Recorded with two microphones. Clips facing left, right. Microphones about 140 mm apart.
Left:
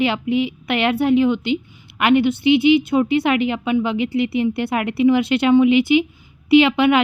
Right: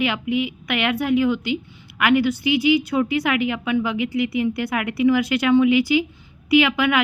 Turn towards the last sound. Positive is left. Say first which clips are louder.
# left 4 dB
turn(degrees=30)  # may be behind; listen again after turning